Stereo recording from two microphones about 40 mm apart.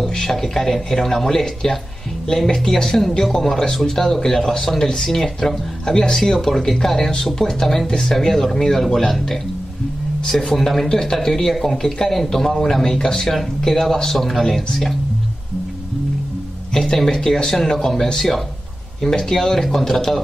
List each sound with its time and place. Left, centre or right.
0.1 s speech: centre
16.7 s speech: centre
18.9 s speech: centre